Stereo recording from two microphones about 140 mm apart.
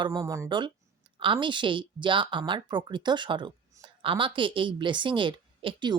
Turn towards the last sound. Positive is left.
turn(degrees=-35)  # may be behind; listen again after turning